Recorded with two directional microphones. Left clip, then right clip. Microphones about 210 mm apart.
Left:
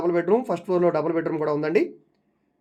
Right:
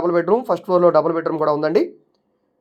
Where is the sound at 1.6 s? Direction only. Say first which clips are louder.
Right 4 dB; centre (ahead or behind).